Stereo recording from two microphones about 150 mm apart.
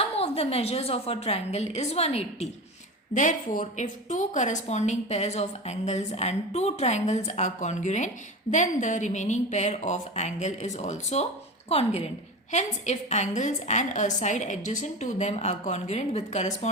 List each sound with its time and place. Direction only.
0.0 s a woman's voice: 40° left (ahead or behind)
3.2 s a woman's voice: 60° left (ahead or behind)